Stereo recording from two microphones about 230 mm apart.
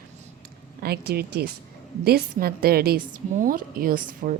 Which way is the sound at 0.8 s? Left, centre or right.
Right.